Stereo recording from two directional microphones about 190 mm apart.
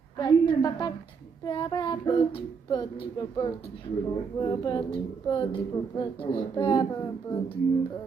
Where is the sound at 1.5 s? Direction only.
20° left (ahead or behind).